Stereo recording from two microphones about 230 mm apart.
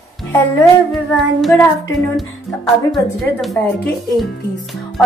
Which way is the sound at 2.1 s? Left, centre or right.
Centre.